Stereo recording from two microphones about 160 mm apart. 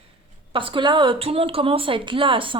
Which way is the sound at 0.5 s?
30° right (ahead or behind).